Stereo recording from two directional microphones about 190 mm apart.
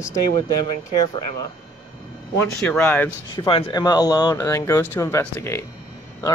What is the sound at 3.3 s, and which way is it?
Speech, 30° left (ahead or behind).